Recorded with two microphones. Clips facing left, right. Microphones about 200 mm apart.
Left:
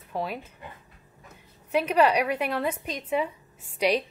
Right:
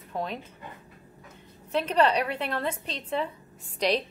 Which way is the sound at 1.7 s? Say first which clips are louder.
Left 2 dB; 10° left (ahead or behind).